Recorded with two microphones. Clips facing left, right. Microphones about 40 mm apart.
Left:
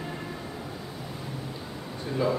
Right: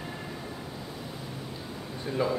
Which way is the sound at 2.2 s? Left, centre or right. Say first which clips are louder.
Left 2 dB; centre.